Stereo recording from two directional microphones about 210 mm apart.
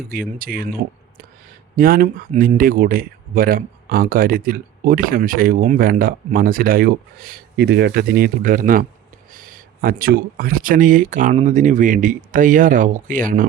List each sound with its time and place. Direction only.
0.0 s speech: 45° right (ahead or behind)
1.7 s speech: 40° right (ahead or behind)